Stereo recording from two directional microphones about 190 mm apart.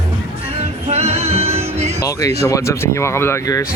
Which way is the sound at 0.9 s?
35° right (ahead or behind).